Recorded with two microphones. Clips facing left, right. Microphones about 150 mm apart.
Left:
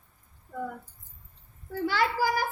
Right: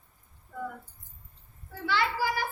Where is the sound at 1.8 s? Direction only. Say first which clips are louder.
Left 2 dB; 45° left (ahead or behind).